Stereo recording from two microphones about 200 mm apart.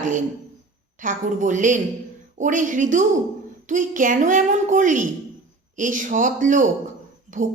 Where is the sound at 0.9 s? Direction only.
40° right (ahead or behind).